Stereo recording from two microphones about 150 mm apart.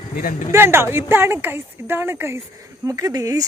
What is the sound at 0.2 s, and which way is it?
Speech, 65° left (ahead or behind).